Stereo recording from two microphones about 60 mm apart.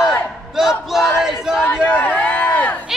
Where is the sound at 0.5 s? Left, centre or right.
Centre.